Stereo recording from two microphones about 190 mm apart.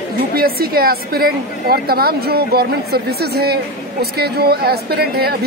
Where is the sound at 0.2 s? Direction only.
50° right (ahead or behind).